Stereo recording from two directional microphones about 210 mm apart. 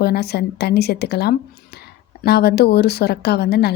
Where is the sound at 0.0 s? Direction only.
50° left (ahead or behind).